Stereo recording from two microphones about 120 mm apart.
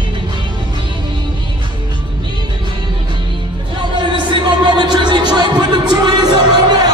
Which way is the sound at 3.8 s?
40° right (ahead or behind).